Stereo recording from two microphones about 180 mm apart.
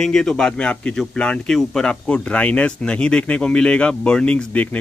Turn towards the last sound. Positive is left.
turn(degrees=10)  # may be behind; listen again after turning